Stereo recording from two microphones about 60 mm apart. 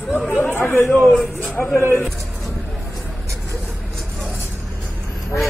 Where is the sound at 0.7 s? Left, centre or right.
Left.